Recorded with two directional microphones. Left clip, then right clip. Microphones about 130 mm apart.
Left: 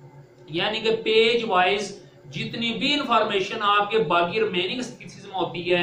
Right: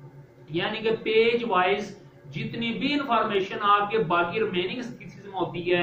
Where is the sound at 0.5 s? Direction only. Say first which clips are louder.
Left 3 dB; 40° left (ahead or behind).